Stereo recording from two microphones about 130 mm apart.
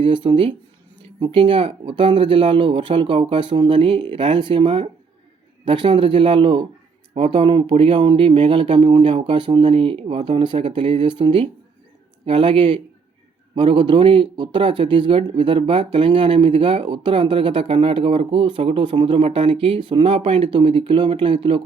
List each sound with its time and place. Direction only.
0.0 s a man's voice: 40° right (ahead or behind)